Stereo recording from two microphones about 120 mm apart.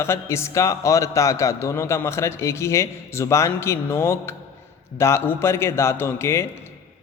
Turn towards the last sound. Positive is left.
turn(degrees=20)  # may be behind; listen again after turning